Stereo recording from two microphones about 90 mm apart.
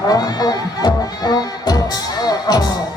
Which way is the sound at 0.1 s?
45° left (ahead or behind).